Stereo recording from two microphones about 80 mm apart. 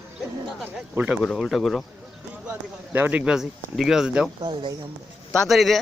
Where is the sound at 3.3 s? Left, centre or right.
Centre.